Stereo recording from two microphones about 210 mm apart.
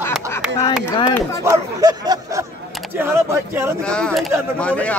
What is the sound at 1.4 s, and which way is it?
Speech, 20° right (ahead or behind).